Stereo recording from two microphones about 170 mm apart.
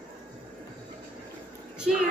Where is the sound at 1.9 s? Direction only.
Centre (ahead or behind).